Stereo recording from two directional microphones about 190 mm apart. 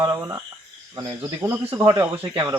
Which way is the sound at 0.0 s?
15° right (ahead or behind).